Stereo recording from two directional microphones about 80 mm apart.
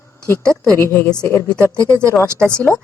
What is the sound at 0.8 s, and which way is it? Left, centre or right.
Speech, left.